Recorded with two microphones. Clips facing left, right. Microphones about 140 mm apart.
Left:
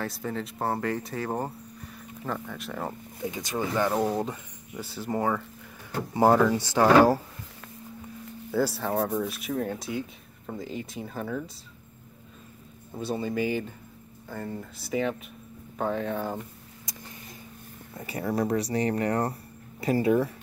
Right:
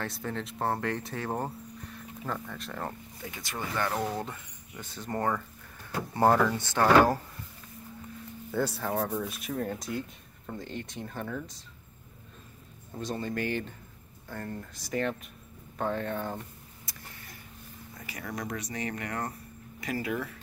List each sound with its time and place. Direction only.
0.0 s speech: centre (ahead or behind)
3.2 s speech: 20° left (ahead or behind)
8.5 s speech: centre (ahead or behind)
12.9 s speech: 5° left (ahead or behind)
16.8 s a sound: 20° left (ahead or behind)
17.9 s speech: 30° left (ahead or behind)